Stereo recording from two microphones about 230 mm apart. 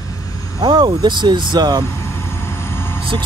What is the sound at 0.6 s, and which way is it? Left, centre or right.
Speech, centre.